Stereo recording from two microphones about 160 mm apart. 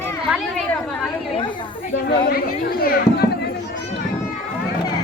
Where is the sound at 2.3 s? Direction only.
70° left (ahead or behind).